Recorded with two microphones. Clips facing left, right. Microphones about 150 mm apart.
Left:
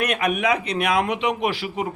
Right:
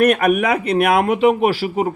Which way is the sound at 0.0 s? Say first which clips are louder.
Right 7 dB; 50° right (ahead or behind).